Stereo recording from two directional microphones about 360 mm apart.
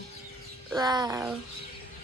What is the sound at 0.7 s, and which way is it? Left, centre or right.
Speech, centre.